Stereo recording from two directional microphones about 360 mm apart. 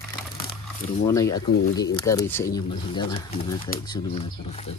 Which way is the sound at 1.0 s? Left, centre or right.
Centre.